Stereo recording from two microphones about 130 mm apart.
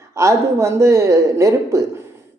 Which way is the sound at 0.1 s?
20° right (ahead or behind).